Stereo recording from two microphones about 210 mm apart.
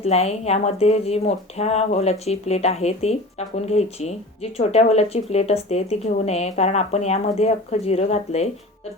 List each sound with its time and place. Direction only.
0.0 s a woman's voice: 30° left (ahead or behind)